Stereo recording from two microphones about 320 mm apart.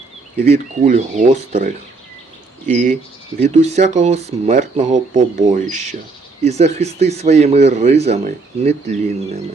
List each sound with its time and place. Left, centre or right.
0.4 s speech: right
2.7 s speech: right